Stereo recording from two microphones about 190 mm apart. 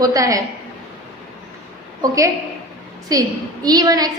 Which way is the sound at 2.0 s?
20° right (ahead or behind).